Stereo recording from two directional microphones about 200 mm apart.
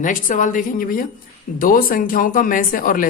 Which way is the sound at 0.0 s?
40° left (ahead or behind).